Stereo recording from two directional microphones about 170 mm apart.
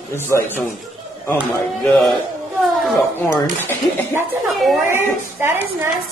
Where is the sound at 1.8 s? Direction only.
Centre (ahead or behind).